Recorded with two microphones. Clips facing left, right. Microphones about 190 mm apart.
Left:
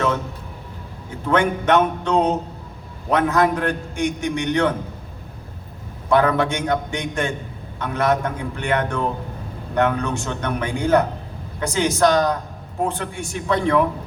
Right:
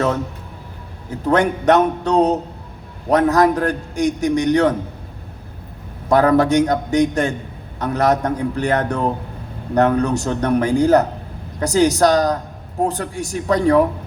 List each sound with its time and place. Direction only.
1.2 s a man's voice: 40° right (ahead or behind)
6.1 s a man's voice: 40° right (ahead or behind)